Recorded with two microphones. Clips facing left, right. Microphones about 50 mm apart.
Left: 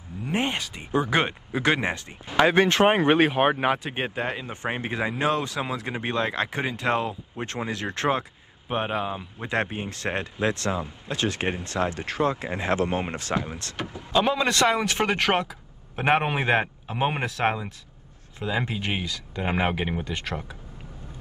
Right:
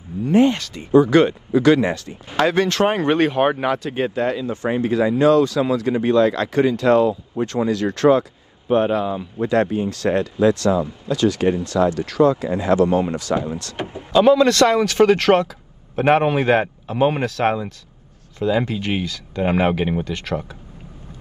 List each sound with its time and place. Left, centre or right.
0.2 s speech: left
3.6 s speech: left
8.6 s a man's voice: centre
9.5 s speech: left
14.3 s a man's voice: centre